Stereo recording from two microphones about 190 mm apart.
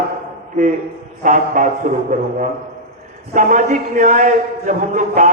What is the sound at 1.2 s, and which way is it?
A man's voice, 40° right (ahead or behind).